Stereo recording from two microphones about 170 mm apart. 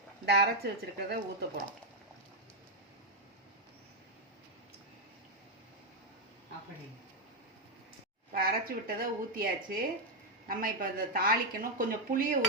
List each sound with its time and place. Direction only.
0.3 s speech: 75° right (ahead or behind)
8.3 s speech: 60° right (ahead or behind)